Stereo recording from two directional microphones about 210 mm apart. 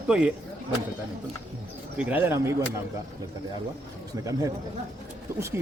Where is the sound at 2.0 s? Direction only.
10° right (ahead or behind).